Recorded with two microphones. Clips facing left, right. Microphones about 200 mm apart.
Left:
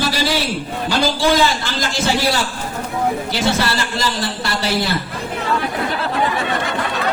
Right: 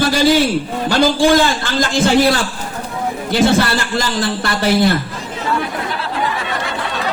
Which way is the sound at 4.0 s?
50° right (ahead or behind).